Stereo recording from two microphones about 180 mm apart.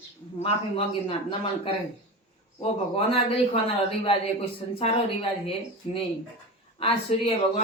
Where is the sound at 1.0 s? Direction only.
30° left (ahead or behind).